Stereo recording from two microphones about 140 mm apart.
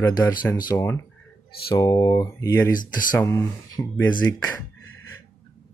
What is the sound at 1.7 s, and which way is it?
Speech, 25° left (ahead or behind).